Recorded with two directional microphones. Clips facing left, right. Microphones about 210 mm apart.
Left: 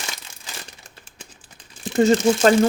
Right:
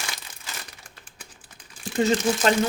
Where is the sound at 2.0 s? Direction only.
45° left (ahead or behind).